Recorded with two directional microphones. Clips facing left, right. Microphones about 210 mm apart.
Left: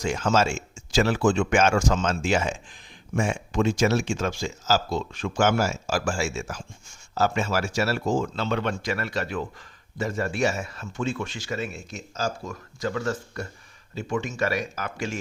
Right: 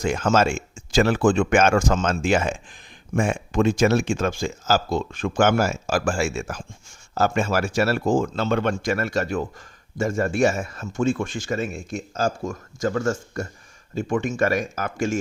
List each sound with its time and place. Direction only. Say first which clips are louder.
0.0 s speech: right 3 dB; 55° right (ahead or behind)